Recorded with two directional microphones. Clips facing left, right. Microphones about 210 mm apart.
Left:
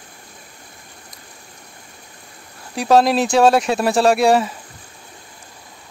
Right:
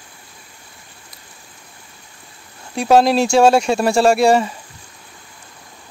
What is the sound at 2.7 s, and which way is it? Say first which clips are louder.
Speech: right 1 dB; centre (ahead or behind).